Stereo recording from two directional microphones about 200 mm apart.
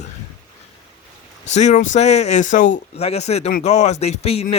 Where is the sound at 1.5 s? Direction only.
35° left (ahead or behind).